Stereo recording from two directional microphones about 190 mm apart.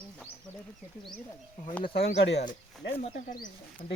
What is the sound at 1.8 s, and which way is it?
Speech, 25° left (ahead or behind).